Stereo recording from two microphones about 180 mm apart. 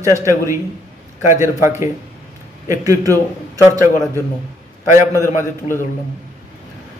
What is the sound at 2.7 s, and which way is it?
Music, 20° right (ahead or behind).